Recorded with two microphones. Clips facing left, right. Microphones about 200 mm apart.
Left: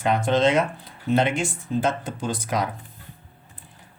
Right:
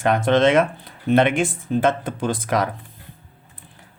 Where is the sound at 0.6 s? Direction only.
60° right (ahead or behind).